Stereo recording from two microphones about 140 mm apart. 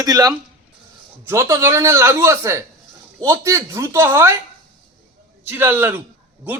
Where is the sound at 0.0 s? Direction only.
25° right (ahead or behind).